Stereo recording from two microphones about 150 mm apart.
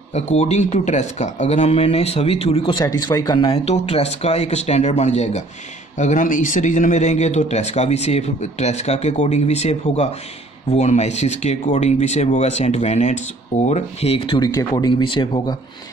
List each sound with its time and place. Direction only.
0.1 s speech: 45° left (ahead or behind)